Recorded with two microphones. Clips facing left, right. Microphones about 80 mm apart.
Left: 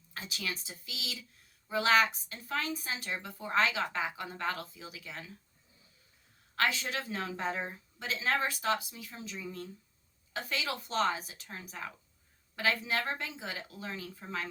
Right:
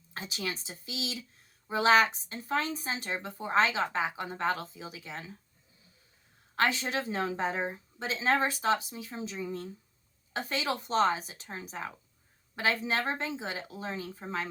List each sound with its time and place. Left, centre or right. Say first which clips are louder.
0.1 s a woman's voice: right 3 dB; right
6.6 s a woman's voice: right 3 dB; right